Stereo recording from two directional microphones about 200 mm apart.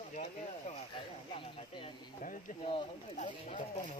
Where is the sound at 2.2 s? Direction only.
40° left (ahead or behind).